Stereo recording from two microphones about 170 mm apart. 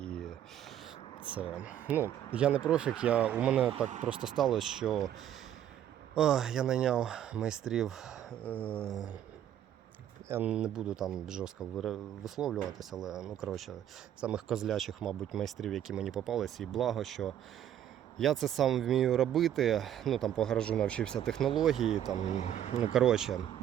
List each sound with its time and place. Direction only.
0.0 s a sound: 5° left (ahead or behind)
1.9 s speech: 10° right (ahead or behind)
6.1 s speech: 5° right (ahead or behind)
8.4 s a sound: 10° left (ahead or behind)
10.2 s speech: 10° right (ahead or behind)
22.1 s speech: 45° left (ahead or behind)
22.9 s speech: 5° right (ahead or behind)